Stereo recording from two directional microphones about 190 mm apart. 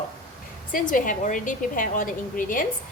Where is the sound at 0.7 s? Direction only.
45° left (ahead or behind).